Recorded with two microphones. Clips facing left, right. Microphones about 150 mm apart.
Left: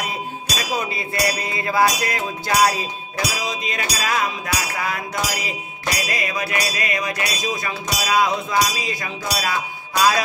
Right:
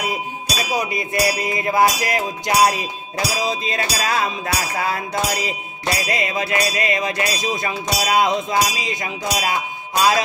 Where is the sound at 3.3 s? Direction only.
30° right (ahead or behind).